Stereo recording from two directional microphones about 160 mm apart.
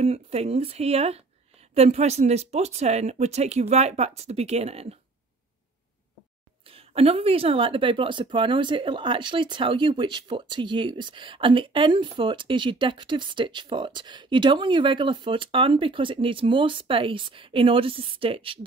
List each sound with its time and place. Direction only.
0.0 s speech: 40° right (ahead or behind)
6.7 s speech: 40° right (ahead or behind)